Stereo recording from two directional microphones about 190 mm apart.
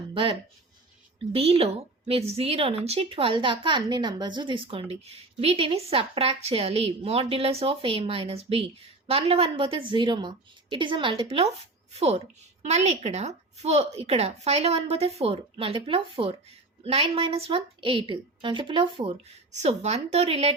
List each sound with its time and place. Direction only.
0.1 s a woman's voice: 25° right (ahead or behind)